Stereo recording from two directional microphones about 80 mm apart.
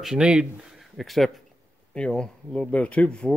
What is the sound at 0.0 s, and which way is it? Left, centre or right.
Speech, centre.